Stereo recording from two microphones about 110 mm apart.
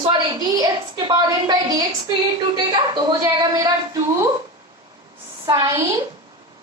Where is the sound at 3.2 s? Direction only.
30° right (ahead or behind).